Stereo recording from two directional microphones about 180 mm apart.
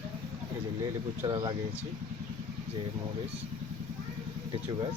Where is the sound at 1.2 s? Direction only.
20° right (ahead or behind).